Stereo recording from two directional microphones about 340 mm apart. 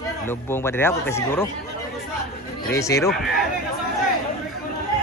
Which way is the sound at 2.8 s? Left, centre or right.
Centre.